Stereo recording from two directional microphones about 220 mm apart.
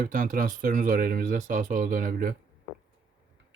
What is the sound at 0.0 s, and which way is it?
Speech, 35° right (ahead or behind).